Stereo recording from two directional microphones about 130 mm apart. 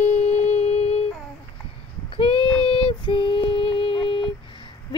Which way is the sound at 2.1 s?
45° left (ahead or behind).